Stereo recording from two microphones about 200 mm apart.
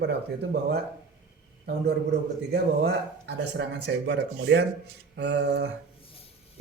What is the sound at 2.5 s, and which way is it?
Speech, 55° right (ahead or behind).